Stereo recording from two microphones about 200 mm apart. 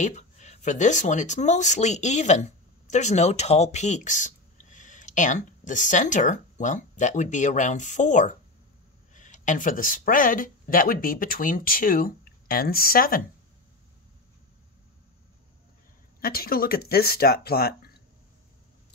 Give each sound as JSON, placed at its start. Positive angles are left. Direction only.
{"t": 0.0, "sound": "speech", "side_deg": 35}
{"t": 16.2, "sound": "speech", "side_deg": 50}